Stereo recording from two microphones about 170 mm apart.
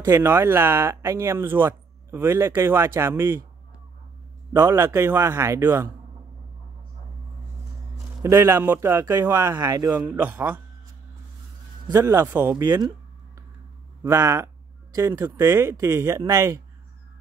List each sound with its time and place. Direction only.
0.0 s speech: 15° right (ahead or behind)
4.5 s speech: 15° right (ahead or behind)
8.2 s speech: 15° right (ahead or behind)
10.0 s speech: 10° right (ahead or behind)
11.9 s speech: 20° right (ahead or behind)
14.0 s speech: 15° right (ahead or behind)